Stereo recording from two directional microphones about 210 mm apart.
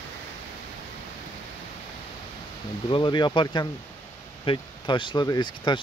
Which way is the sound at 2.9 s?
20° left (ahead or behind).